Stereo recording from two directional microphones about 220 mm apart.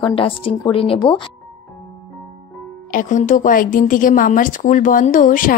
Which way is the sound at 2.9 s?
35° left (ahead or behind).